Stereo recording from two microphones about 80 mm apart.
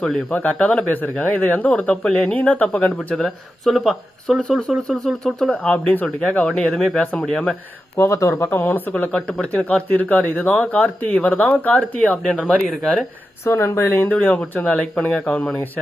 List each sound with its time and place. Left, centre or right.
0.3 s speech: centre
3.2 s speech: centre
7.9 s speech: left; by 12.2 s centre
12.2 s speech: centre
13.4 s speech: left